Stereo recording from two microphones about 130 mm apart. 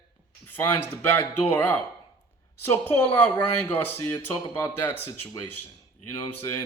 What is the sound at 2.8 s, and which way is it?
Speech, 15° left (ahead or behind).